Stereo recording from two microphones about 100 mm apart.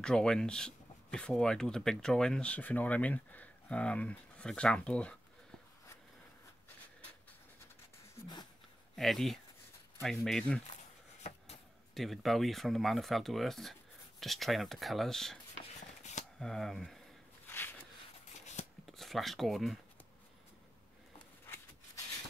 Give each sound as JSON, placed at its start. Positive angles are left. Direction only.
{"t": 0.0, "sound": "speech", "side_deg": 5}
{"t": 8.9, "sound": "speech", "side_deg": 0}
{"t": 11.9, "sound": "speech", "side_deg": 0}
{"t": 16.3, "sound": "speech", "side_deg": 5}
{"t": 17.5, "sound": "a sound", "side_deg": 20}
{"t": 18.9, "sound": "speech", "side_deg": 0}